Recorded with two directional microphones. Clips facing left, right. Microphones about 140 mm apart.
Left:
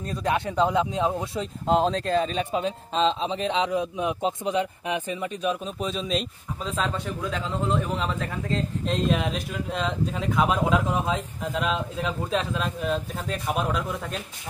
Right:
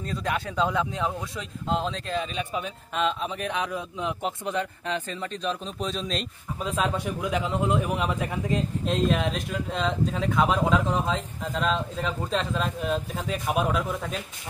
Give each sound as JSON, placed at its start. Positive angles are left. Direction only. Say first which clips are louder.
{"t": 0.2, "sound": "speech", "louder": "left 4 dB", "side_deg": 20}
{"t": 1.7, "sound": "speech", "louder": "left 6 dB", "side_deg": 40}
{"t": 6.6, "sound": "a man's voice", "louder": "right 2 dB", "side_deg": -10}
{"t": 8.8, "sound": "speech", "louder": "even", "side_deg": 0}